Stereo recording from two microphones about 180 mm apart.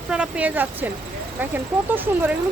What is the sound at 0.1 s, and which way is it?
Speech, 5° right (ahead or behind).